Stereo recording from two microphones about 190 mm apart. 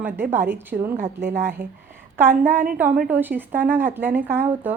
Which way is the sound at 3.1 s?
10° right (ahead or behind).